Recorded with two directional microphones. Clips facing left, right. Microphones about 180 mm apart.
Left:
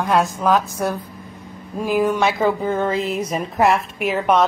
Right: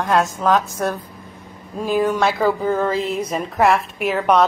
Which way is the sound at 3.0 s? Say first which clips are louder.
Even; 30° right (ahead or behind).